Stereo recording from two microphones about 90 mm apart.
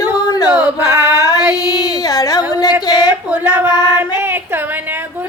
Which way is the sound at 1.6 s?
45° left (ahead or behind).